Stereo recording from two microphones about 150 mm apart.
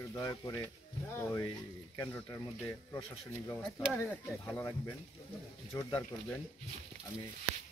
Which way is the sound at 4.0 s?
15° left (ahead or behind).